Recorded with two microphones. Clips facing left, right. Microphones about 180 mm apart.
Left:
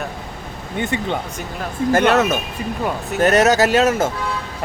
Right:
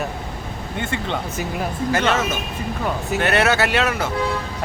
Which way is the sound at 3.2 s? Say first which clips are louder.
Left 6 dB; 40° left (ahead or behind).